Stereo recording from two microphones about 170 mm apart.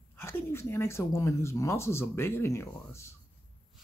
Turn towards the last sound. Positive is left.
turn(degrees=15)  # may be behind; listen again after turning